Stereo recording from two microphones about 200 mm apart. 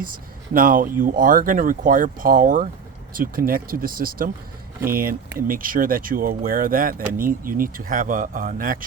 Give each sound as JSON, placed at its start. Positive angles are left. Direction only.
{"t": 0.0, "sound": "speech", "side_deg": -45}